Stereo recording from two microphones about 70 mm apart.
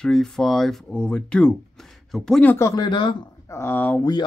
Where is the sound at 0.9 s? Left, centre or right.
Centre.